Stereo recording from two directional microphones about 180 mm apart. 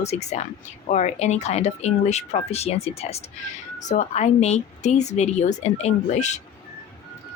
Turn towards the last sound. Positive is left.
turn(degrees=40)  # may be behind; listen again after turning